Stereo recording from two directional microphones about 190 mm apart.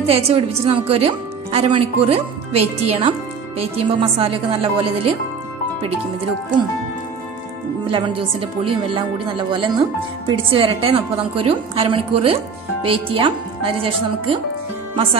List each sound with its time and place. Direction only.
0.0 s speech: 30° right (ahead or behind)
7.8 s speech: 30° right (ahead or behind)